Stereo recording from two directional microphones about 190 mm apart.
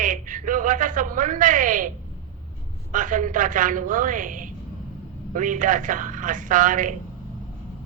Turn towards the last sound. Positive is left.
turn(degrees=-45)  # may be behind; listen again after turning